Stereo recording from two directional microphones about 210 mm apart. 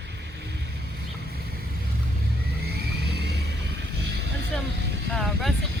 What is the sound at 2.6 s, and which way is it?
Vehicle, 50° right (ahead or behind).